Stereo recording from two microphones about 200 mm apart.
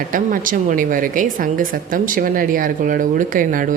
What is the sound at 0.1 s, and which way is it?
A woman's voice, 40° right (ahead or behind).